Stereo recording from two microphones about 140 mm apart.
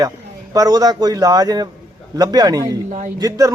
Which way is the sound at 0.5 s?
25° right (ahead or behind).